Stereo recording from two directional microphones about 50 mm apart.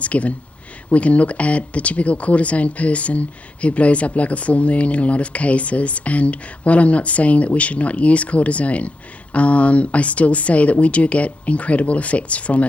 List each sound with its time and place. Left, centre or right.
0.0 s speech: left